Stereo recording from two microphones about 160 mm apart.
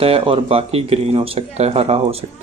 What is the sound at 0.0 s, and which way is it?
Speech, 35° right (ahead or behind).